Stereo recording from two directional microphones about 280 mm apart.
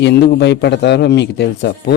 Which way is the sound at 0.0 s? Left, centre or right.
Left.